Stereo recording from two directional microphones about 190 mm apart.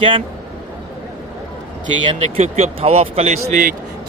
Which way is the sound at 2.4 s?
35° right (ahead or behind).